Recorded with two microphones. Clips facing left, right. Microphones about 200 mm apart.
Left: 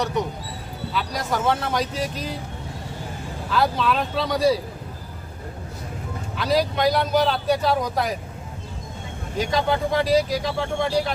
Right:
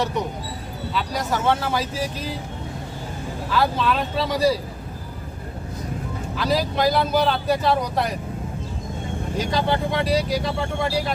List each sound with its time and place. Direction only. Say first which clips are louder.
0.9 s speech: right 1 dB; centre (ahead or behind)
3.5 s speech: even; centre (ahead or behind)
6.3 s speech: left 1 dB; centre (ahead or behind)
9.4 s speech: left 1 dB; centre (ahead or behind)